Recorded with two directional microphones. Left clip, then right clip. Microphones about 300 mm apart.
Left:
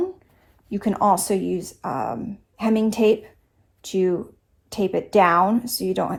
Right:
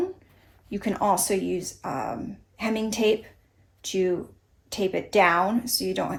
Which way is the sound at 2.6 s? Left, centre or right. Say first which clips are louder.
Left 5 dB; centre.